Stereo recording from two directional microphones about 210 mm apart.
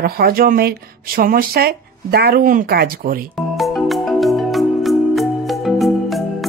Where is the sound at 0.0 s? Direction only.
45° right (ahead or behind).